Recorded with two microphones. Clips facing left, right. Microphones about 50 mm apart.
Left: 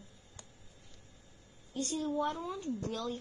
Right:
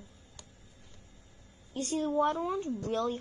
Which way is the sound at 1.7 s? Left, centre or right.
Right.